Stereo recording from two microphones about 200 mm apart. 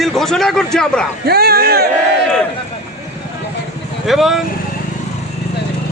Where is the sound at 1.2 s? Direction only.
50° right (ahead or behind).